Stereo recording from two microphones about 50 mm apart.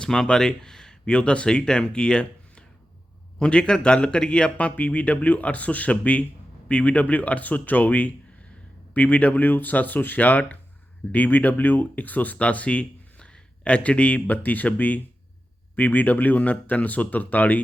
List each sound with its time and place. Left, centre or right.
0.0 s speech: centre
4.5 s speech: left